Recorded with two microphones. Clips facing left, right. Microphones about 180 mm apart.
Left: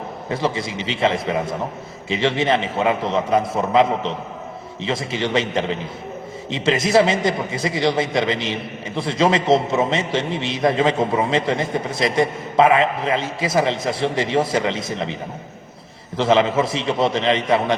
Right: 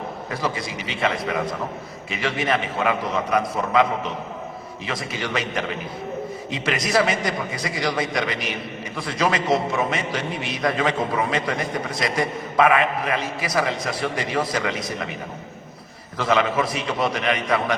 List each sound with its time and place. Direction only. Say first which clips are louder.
0.3 s a man's voice: left 5 dB; 25° left (ahead or behind)
16.1 s a man's voice: left 4 dB; 25° left (ahead or behind)